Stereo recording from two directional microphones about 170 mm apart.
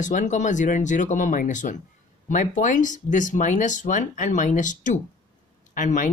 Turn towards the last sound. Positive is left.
turn(degrees=50)  # may be behind; listen again after turning